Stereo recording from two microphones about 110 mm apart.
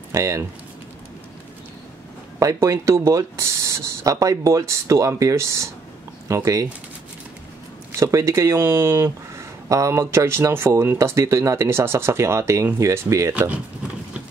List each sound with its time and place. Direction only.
0.1 s speech: 25° right (ahead or behind)
2.3 s speech: 25° right (ahead or behind)
7.9 s speech: 30° right (ahead or behind)
13.3 s speech: 10° right (ahead or behind)